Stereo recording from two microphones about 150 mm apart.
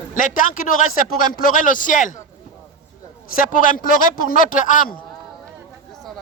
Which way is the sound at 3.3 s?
70° left (ahead or behind).